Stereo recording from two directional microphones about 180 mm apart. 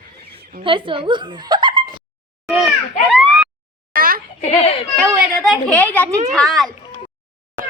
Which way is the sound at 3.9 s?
55° right (ahead or behind).